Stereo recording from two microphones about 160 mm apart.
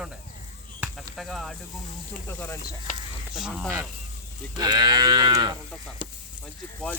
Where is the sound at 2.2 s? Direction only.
10° left (ahead or behind).